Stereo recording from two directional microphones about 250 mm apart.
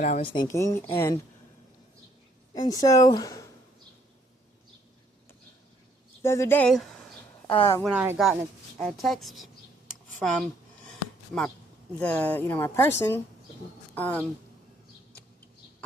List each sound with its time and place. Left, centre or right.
0.0 s speech: left
0.3 s a woman's voice: centre
2.5 s a woman's voice: centre
6.2 s a woman's voice: centre
11.9 s a woman's voice: centre